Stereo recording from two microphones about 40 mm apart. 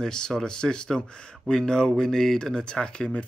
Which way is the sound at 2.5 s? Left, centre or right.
Left.